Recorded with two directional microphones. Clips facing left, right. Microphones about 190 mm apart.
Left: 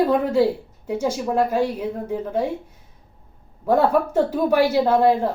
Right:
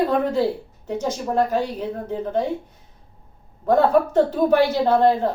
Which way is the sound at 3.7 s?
10° left (ahead or behind).